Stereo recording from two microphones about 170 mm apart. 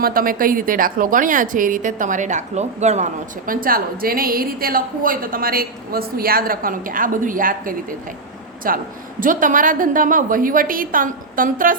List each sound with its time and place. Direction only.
0.0 s a woman's voice: 60° right (ahead or behind)